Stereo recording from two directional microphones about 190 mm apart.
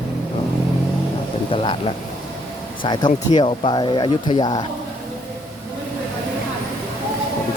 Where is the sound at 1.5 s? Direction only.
30° left (ahead or behind).